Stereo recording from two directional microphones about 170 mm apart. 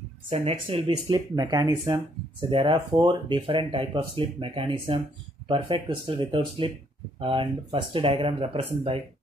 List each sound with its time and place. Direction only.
0.3 s speech: 35° right (ahead or behind)